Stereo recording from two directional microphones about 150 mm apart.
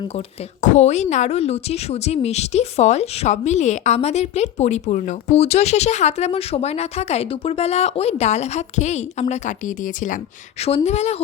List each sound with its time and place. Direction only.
0.6 s speech: 50° left (ahead or behind)
10.8 s speech: 45° left (ahead or behind)